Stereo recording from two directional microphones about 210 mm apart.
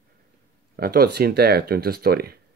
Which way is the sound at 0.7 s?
45° right (ahead or behind).